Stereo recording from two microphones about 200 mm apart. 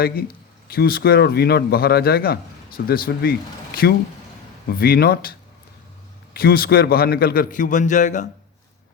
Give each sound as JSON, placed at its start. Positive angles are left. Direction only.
{"t": 0.7, "sound": "speech", "side_deg": 50}
{"t": 6.3, "sound": "speech", "side_deg": 50}